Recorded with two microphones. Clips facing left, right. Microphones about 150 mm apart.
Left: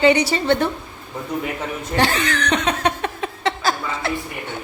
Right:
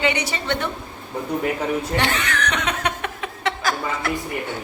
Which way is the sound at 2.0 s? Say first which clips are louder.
Left 3 dB; 35° left (ahead or behind).